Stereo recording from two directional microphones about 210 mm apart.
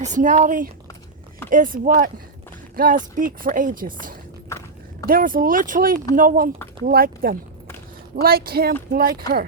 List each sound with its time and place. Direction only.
0.0 s speech: 35° right (ahead or behind)
4.4 s a sound: 15° left (ahead or behind)
5.0 s speech: 45° right (ahead or behind)